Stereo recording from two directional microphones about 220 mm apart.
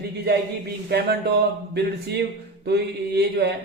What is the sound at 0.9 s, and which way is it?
A man's voice, 50° right (ahead or behind).